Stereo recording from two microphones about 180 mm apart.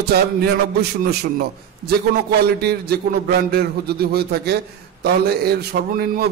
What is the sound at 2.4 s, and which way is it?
A man's voice, 60° right (ahead or behind).